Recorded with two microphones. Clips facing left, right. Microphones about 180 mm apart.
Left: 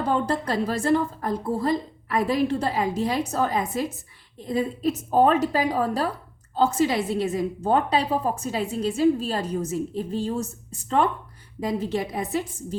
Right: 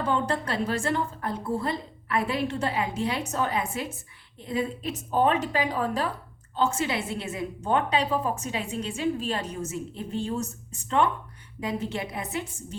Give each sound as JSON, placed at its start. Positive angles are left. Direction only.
{"t": 0.1, "sound": "a woman's voice", "side_deg": 40}